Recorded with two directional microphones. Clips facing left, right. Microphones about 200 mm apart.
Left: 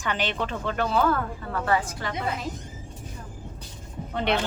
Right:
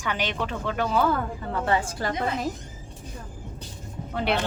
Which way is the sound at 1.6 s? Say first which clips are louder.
Right 1 dB; 25° right (ahead or behind).